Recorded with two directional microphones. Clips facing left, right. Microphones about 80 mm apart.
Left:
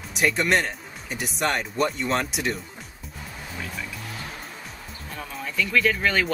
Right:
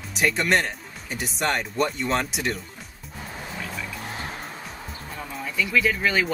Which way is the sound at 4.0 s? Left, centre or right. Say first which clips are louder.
Right 3 dB; right.